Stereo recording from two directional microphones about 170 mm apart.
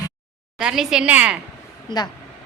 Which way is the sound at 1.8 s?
25° left (ahead or behind).